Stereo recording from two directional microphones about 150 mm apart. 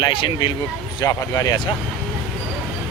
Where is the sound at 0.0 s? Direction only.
30° left (ahead or behind).